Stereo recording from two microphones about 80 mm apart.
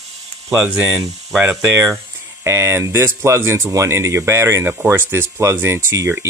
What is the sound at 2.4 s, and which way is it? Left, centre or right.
Speech, right.